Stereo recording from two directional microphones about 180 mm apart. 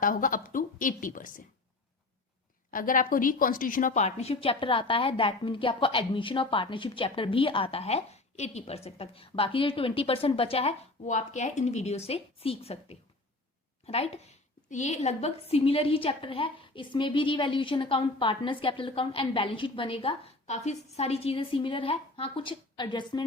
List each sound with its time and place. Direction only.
0.0 s a woman's voice: 50° left (ahead or behind)
2.7 s a woman's voice: 50° left (ahead or behind); by 23.2 s 25° left (ahead or behind)